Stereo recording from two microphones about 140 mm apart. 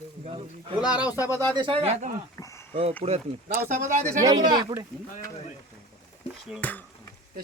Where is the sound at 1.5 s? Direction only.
35° right (ahead or behind); by 3.2 s 50° right (ahead or behind).